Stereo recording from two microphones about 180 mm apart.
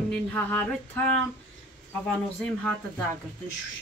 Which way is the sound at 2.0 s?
5° left (ahead or behind).